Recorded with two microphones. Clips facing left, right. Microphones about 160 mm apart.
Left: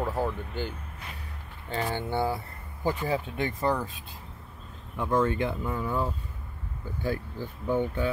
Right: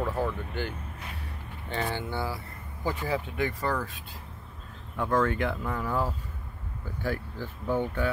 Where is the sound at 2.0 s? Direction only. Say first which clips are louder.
Left 4 dB; 25° left (ahead or behind).